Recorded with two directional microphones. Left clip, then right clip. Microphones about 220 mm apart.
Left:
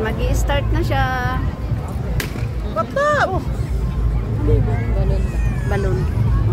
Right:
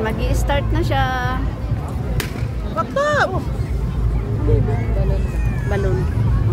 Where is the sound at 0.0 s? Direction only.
10° right (ahead or behind).